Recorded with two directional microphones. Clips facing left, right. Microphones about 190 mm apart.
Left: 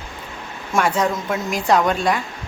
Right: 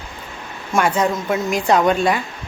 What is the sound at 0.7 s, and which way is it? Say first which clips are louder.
Speech: right 1 dB; centre (ahead or behind).